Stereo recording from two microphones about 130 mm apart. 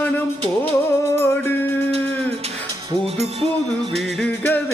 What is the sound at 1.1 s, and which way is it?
Music, 20° left (ahead or behind).